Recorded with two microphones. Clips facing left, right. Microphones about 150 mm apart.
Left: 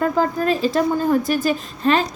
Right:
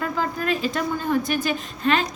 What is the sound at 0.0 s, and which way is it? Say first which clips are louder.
A woman's voice: left 7 dB; 35° left (ahead or behind).